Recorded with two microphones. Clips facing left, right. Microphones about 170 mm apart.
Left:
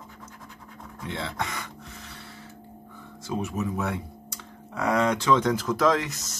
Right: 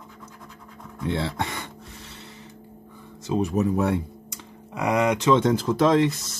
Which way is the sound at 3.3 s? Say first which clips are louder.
Right 7 dB; 35° right (ahead or behind).